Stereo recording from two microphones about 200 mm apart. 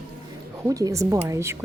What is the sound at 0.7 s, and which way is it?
Speech, 15° right (ahead or behind).